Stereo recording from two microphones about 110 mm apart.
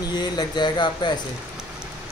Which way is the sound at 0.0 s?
40° left (ahead or behind).